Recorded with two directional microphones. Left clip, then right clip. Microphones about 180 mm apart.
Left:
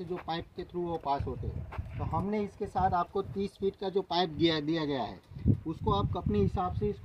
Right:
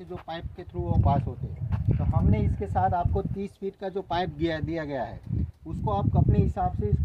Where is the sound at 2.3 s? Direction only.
10° right (ahead or behind).